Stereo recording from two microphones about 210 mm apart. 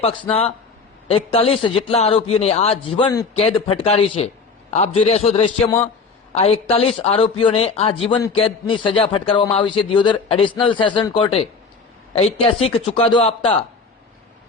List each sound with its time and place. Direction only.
0.3 s a man's voice: 30° left (ahead or behind)